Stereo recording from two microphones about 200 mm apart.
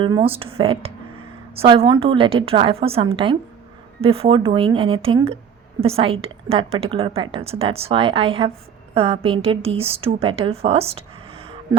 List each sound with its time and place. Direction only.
0.0 s a woman's voice: 25° right (ahead or behind)